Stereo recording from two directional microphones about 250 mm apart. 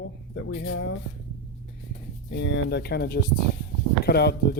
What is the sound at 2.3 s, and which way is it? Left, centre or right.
Speech, left.